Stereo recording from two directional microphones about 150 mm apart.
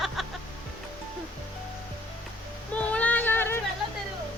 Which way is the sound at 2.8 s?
10° left (ahead or behind).